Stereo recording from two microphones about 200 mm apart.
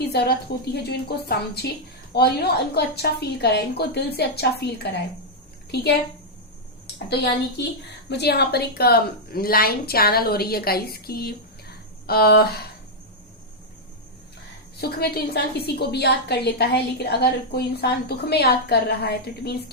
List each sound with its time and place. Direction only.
0.1 s a woman's voice: 55° left (ahead or behind)
8.1 s a woman's voice: 55° left (ahead or behind)
14.8 s a woman's voice: 50° left (ahead or behind)